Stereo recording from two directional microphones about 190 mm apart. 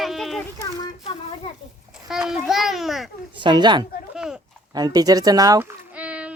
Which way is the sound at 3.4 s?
25° right (ahead or behind).